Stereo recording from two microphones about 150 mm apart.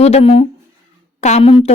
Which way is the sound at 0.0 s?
40° left (ahead or behind).